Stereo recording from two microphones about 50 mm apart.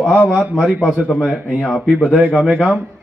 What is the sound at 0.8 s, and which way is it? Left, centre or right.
A man's voice, right.